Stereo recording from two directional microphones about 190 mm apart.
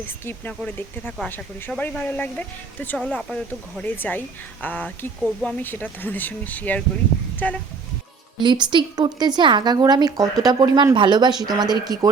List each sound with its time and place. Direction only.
0.3 s speech: 10° left (ahead or behind)
8.4 s speech: 25° right (ahead or behind)